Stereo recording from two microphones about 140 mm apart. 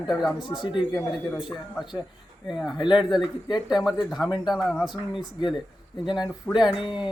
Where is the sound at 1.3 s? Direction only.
Centre (ahead or behind).